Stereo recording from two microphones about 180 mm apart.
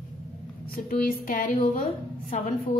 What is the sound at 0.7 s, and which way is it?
A woman's voice, 50° left (ahead or behind).